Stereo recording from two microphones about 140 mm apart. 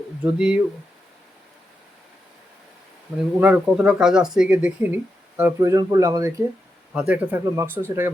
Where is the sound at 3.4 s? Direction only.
10° right (ahead or behind).